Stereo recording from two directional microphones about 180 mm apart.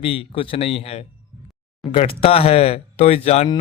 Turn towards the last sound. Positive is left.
turn(degrees=35)  # may be behind; listen again after turning